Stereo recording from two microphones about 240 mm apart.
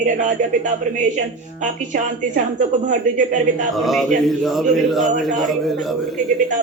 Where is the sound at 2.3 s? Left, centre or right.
Right.